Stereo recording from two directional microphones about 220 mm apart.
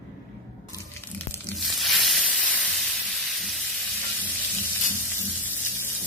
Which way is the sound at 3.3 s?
Centre (ahead or behind).